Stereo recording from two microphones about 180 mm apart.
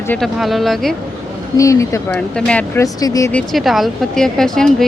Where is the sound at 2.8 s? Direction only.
20° left (ahead or behind).